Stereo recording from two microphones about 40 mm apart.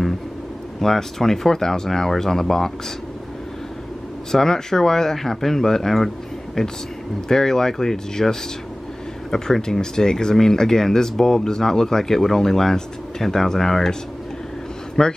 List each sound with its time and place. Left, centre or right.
0.7 s speech: centre
4.3 s speech: centre
15.0 s speech: centre